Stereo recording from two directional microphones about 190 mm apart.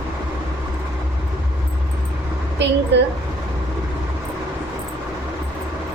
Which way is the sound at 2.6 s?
65° right (ahead or behind).